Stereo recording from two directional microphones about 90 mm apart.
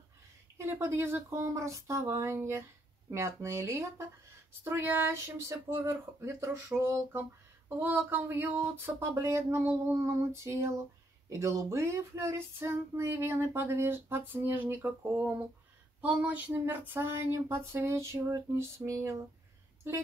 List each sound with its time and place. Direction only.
0.6 s speech: 30° right (ahead or behind)
7.8 s female singing: 20° right (ahead or behind)